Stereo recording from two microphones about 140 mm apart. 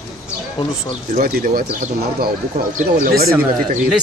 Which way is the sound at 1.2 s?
90° right.